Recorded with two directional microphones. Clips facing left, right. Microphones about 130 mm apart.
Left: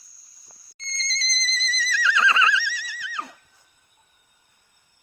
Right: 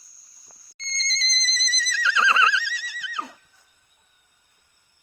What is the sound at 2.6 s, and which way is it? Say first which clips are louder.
Neigh: left 1 dB; 25° right (ahead or behind).